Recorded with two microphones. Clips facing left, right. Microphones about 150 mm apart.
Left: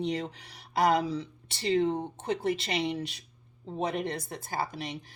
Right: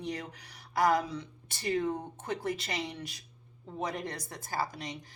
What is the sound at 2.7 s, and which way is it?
Speech, 65° left (ahead or behind).